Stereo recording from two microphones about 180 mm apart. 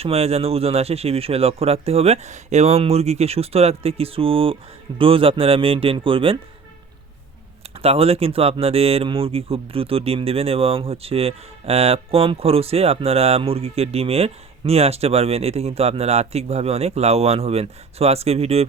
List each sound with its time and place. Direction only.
0.0 s speech: 35° right (ahead or behind)
7.8 s speech: 35° right (ahead or behind)